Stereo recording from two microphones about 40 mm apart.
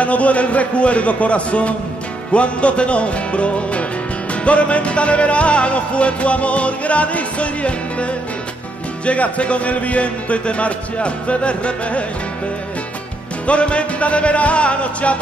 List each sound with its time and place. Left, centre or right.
0.0 s music: left
13.5 s music: left